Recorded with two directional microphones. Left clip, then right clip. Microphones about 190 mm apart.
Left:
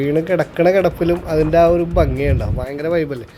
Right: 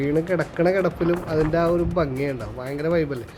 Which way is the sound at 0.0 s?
15° left (ahead or behind).